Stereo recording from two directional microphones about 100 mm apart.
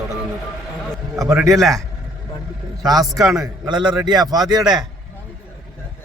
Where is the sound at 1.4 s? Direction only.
Centre (ahead or behind).